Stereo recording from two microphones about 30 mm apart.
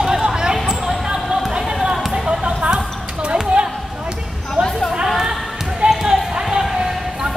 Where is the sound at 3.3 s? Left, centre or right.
Right.